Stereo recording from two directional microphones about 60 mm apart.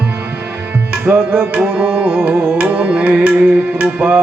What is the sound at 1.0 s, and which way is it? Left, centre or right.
Tabla, right.